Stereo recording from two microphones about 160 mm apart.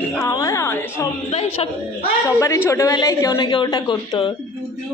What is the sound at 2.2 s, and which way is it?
A woman's voice, 20° left (ahead or behind).